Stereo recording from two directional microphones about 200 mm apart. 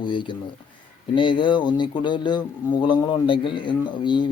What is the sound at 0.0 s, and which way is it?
Speech, 25° left (ahead or behind).